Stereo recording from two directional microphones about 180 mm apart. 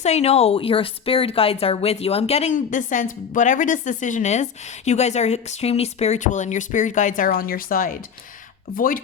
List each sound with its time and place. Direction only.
0.0 s speech: 35° left (ahead or behind)